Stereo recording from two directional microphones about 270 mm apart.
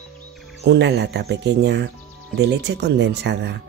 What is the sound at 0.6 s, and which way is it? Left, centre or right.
Speech, right.